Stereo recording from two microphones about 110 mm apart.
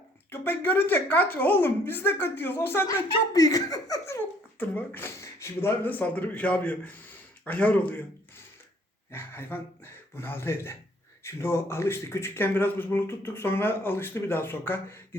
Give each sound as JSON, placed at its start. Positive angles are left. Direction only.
{"t": 0.3, "sound": "speech", "side_deg": 20}
{"t": 3.3, "sound": "speech", "side_deg": 35}
{"t": 4.6, "sound": "speech", "side_deg": 15}
{"t": 9.1, "sound": "speech", "side_deg": 20}